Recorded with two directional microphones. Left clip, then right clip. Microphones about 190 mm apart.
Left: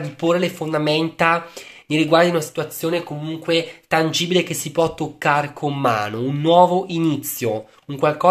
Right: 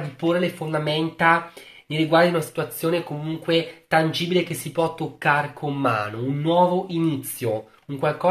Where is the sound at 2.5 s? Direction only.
25° left (ahead or behind).